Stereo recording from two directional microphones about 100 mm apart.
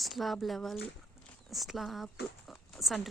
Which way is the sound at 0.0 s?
Centre (ahead or behind).